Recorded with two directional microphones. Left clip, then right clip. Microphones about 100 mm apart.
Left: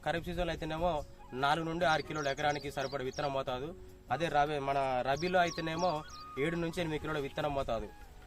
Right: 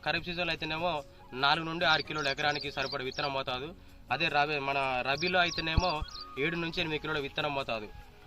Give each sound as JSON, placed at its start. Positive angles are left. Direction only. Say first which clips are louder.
{"t": 0.0, "sound": "a man's voice", "louder": "right 3 dB", "side_deg": 30}
{"t": 6.7, "sound": "speech", "louder": "right 3 dB", "side_deg": 35}